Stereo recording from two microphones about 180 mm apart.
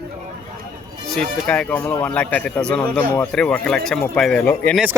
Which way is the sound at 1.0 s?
5° left (ahead or behind).